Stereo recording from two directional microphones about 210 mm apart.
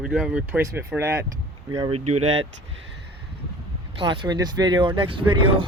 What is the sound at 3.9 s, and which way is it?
Speech, 25° right (ahead or behind).